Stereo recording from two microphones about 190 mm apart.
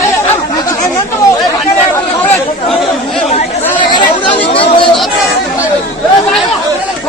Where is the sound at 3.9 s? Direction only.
25° left (ahead or behind).